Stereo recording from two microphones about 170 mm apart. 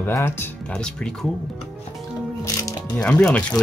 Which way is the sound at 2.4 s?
20° left (ahead or behind).